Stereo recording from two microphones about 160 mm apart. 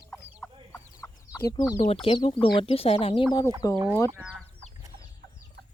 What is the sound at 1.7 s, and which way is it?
Speech, 35° left (ahead or behind).